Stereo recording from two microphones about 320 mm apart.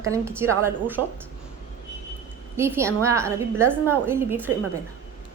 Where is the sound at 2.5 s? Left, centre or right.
Centre.